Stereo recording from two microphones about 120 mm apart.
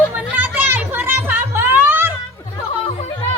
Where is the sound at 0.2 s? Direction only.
15° right (ahead or behind).